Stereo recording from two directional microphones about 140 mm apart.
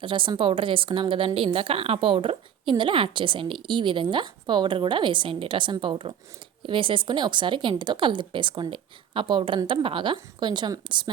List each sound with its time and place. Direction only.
0.0 s a woman's voice: 35° right (ahead or behind)